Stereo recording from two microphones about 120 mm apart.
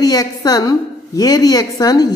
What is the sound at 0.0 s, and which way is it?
A woman's voice, 30° left (ahead or behind).